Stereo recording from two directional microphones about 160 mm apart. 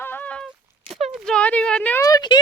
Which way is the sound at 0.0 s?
10° left (ahead or behind).